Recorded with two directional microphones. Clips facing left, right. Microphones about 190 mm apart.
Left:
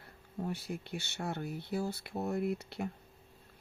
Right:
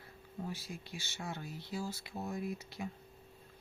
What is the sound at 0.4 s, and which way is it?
Speech, 60° left (ahead or behind).